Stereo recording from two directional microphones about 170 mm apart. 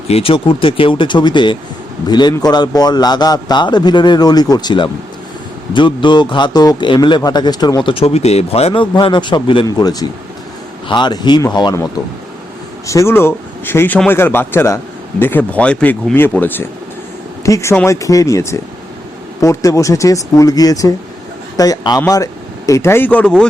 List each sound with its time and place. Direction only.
0.1 s speech: 35° left (ahead or behind)
12.9 s speech: 15° left (ahead or behind)